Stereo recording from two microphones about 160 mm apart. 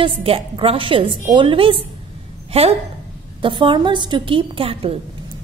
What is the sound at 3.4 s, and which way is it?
A woman's voice, 30° right (ahead or behind).